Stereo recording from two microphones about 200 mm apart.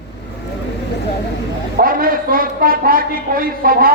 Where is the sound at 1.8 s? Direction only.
45° right (ahead or behind).